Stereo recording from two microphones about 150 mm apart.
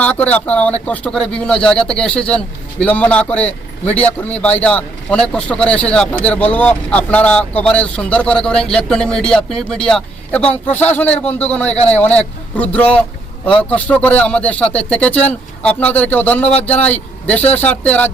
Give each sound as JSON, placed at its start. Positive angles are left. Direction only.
{"t": 0.0, "sound": "speech", "side_deg": 10}
{"t": 16.4, "sound": "speech", "side_deg": 45}
{"t": 16.8, "sound": "speech", "side_deg": 10}